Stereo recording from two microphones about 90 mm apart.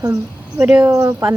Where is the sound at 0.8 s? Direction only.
40° right (ahead or behind).